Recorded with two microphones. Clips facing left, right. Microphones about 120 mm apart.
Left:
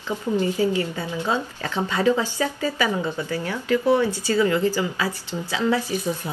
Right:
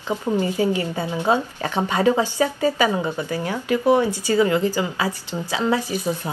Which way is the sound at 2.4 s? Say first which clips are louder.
Right 4 dB; 30° right (ahead or behind).